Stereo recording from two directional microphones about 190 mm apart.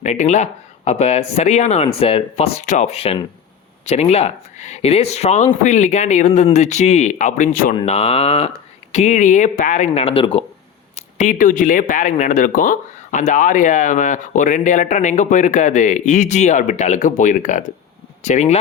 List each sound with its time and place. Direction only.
0.0 s speech: 40° left (ahead or behind)
7.9 s speech: 30° left (ahead or behind)